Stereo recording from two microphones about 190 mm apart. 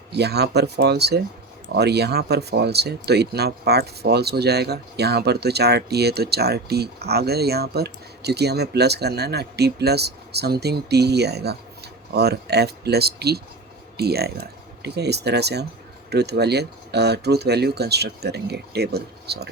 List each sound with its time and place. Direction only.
0.1 s speech: 60° right (ahead or behind)